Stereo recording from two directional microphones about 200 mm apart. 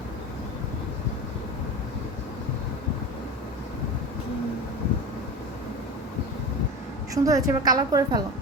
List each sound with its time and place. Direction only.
7.1 s a woman's voice: 15° right (ahead or behind)